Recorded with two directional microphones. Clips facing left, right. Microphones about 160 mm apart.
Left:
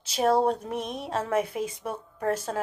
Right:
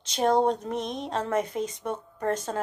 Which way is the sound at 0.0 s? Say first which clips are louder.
Even; 5° left (ahead or behind).